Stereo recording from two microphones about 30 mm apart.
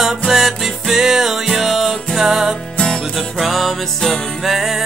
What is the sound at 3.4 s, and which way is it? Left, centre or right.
Music, centre.